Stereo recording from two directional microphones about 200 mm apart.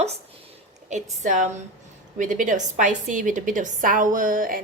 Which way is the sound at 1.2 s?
40° right (ahead or behind).